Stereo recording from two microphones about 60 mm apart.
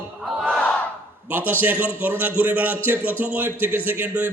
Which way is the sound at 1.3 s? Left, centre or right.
Right.